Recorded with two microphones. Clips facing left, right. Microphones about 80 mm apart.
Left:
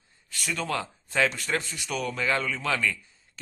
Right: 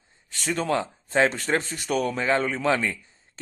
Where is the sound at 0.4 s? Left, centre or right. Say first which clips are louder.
Right 5 dB; right.